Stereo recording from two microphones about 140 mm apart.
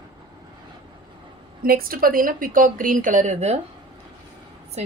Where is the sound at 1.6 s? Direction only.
90° right; by 3.5 s 55° right (ahead or behind).